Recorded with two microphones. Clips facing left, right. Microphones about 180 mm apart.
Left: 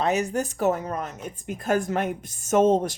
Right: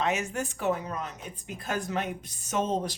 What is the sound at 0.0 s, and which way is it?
Speech, 35° left (ahead or behind).